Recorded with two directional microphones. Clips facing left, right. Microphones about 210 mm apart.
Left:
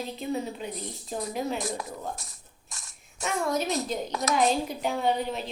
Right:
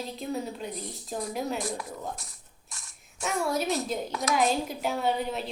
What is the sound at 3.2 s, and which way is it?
A woman's voice, 5° right (ahead or behind).